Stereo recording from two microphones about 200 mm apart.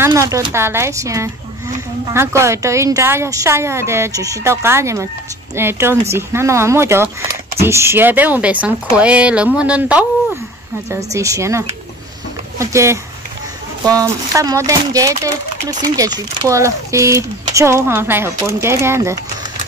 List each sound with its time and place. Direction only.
0.0 s speech: 15° right (ahead or behind)